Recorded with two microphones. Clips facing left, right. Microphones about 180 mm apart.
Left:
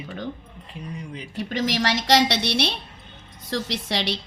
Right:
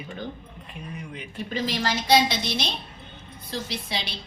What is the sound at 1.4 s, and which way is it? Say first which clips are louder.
A woman's voice: left 3 dB; 75° left (ahead or behind).